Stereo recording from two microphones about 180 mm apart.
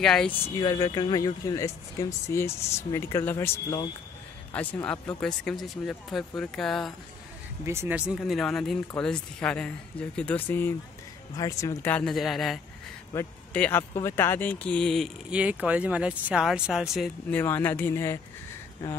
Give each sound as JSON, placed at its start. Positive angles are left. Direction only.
{"t": 0.0, "sound": "speech", "side_deg": 5}
{"t": 0.6, "sound": "a man's voice", "side_deg": 20}
{"t": 7.6, "sound": "speech", "side_deg": -15}
{"t": 13.1, "sound": "speech", "side_deg": 10}
{"t": 17.4, "sound": "speech", "side_deg": 10}